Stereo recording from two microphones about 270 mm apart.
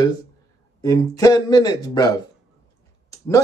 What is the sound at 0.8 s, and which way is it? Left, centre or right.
A man's voice, centre.